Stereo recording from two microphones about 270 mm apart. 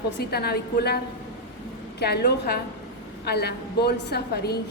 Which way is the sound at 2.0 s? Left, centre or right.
Left.